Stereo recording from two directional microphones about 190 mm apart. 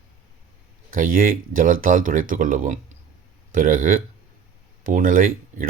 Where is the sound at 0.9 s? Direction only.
45° right (ahead or behind).